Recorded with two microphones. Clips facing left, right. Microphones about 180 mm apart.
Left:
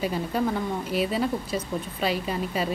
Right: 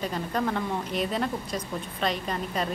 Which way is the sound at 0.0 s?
5° left (ahead or behind).